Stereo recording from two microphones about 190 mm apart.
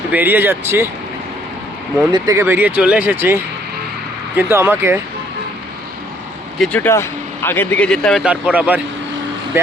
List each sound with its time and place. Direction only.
0.1 s speech: 10° right (ahead or behind)
2.1 s speech: 15° right (ahead or behind)
4.4 s speech: 10° right (ahead or behind)
6.6 s speech: 10° left (ahead or behind); by 8.8 s 5° right (ahead or behind)